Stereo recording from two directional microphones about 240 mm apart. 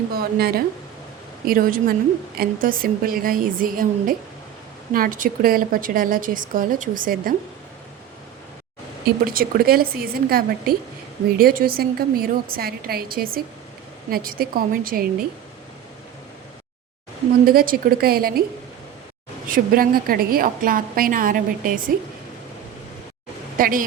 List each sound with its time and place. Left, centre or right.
0.1 s a woman's voice: right
9.0 s a woman's voice: right
17.4 s a woman's voice: right
19.5 s a woman's voice: right
23.6 s a woman's voice: right